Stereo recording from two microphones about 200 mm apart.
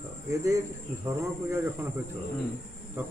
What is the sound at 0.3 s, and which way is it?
Cricket, 15° right (ahead or behind).